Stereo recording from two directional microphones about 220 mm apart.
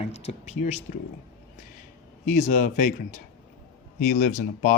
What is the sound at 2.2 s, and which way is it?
Speech, 35° left (ahead or behind).